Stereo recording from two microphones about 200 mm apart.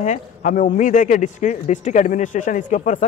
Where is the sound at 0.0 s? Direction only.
40° left (ahead or behind).